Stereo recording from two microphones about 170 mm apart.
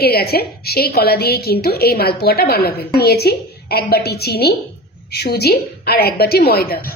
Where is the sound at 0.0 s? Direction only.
65° left (ahead or behind).